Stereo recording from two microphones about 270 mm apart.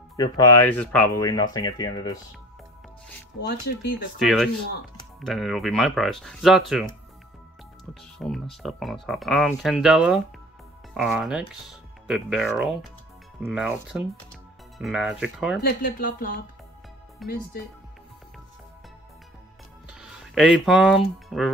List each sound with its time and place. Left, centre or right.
0.1 s speech: centre
3.3 s speech: left
4.2 s speech: centre
7.9 s speech: centre
15.8 s speech: left
17.2 s speech: centre
19.9 s speech: centre